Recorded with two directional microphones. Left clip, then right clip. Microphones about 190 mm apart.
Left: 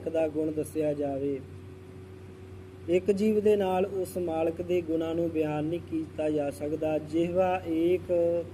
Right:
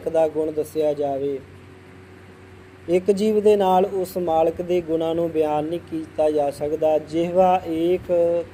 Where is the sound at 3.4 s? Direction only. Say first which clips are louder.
Right 11 dB; 20° right (ahead or behind).